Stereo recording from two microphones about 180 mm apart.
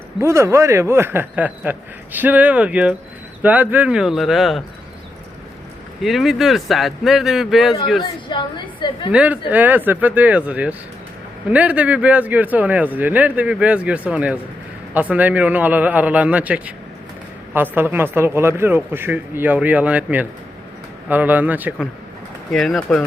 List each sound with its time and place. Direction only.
0.2 s speech: 15° right (ahead or behind); by 4.6 s centre (ahead or behind)
6.0 s speech: centre (ahead or behind)
8.0 s a woman's voice: 25° left (ahead or behind)
9.1 s speech: 10° right (ahead or behind)